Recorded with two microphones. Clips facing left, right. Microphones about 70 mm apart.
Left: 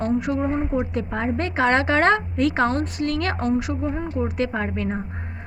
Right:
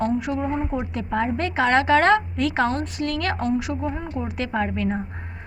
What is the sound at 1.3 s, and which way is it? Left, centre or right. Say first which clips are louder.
A woman's voice: left 1 dB; left.